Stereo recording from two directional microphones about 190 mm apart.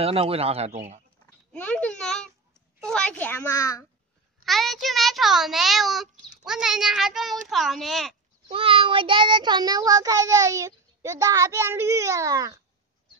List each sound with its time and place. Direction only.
0.0 s a man's voice: 30° right (ahead or behind)
1.2 s a sound: 5° left (ahead or behind)
4.5 s a child's voice: centre (ahead or behind)
8.5 s child singing: 30° right (ahead or behind)